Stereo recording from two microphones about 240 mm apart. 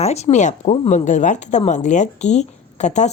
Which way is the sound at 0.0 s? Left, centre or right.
Left.